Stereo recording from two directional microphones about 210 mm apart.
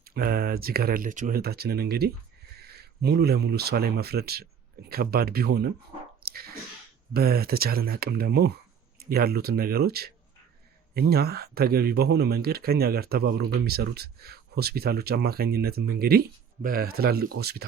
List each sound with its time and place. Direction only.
0.0 s speech: 45° right (ahead or behind)
6.2 s a sound: 45° right (ahead or behind)
7.1 s speech: 45° right (ahead or behind)